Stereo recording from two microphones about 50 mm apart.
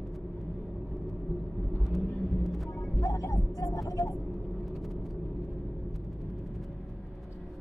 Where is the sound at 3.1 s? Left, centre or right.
Left.